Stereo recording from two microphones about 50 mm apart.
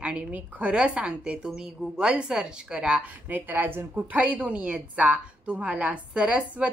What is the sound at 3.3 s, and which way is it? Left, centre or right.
Speech, right.